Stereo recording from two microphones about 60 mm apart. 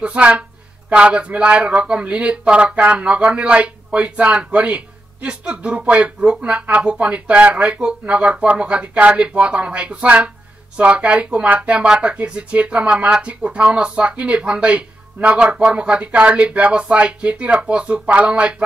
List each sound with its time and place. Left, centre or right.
0.0 s speech: right